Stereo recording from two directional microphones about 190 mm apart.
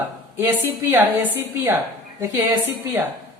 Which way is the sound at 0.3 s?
10° right (ahead or behind).